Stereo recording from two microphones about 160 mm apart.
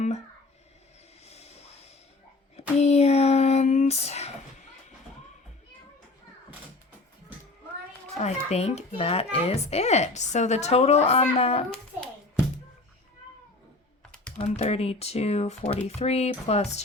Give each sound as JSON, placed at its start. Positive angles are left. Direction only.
{"t": 1.2, "sound": "a sound", "side_deg": 40}
{"t": 8.2, "sound": "a child's voice", "side_deg": 40}
{"t": 14.3, "sound": "a child's voice", "side_deg": 45}